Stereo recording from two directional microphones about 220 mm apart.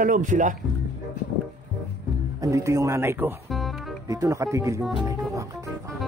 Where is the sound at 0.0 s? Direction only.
35° right (ahead or behind).